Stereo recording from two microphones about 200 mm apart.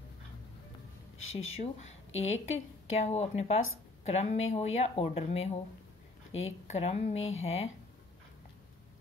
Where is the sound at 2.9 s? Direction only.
30° left (ahead or behind).